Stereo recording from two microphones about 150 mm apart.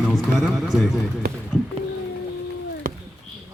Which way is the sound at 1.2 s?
90° right.